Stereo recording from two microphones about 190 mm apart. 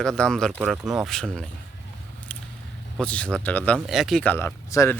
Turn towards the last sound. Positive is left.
turn(degrees=15)  # may be behind; listen again after turning